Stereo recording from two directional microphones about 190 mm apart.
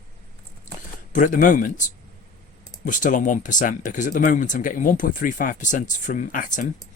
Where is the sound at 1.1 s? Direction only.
40° left (ahead or behind).